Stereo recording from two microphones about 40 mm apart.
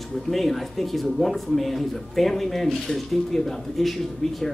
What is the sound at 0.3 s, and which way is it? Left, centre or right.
Speech, centre.